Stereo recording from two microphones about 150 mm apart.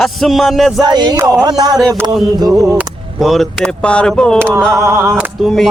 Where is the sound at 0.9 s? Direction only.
30° right (ahead or behind).